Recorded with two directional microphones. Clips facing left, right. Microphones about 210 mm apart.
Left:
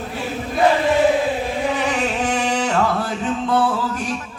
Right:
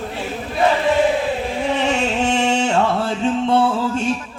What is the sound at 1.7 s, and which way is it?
Music, 25° right (ahead or behind).